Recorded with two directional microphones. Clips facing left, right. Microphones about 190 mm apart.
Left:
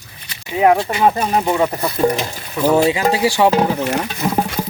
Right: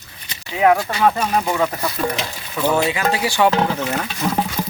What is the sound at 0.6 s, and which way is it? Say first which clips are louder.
Speech: left 2 dB; 25° left (ahead or behind).